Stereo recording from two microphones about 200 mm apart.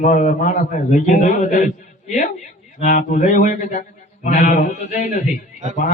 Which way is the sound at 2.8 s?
40° left (ahead or behind).